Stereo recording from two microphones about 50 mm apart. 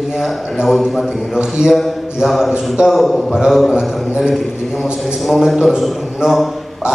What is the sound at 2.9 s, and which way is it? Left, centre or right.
A man's voice, centre.